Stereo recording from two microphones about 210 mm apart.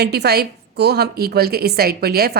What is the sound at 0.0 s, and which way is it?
A woman's voice, 50° right (ahead or behind).